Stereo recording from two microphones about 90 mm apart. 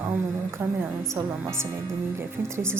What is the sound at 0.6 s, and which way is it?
Speech, 25° right (ahead or behind).